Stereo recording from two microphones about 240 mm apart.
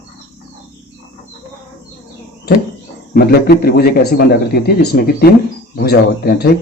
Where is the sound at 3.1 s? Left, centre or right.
Left.